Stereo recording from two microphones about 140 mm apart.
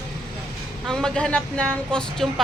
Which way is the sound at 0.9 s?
5° left (ahead or behind).